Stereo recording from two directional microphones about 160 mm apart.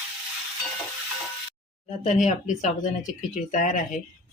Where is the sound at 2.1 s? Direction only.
50° left (ahead or behind).